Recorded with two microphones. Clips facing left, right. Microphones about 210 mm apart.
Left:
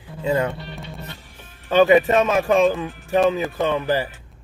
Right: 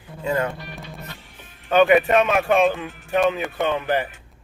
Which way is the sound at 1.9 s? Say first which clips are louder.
Left 1 dB; 30° left (ahead or behind).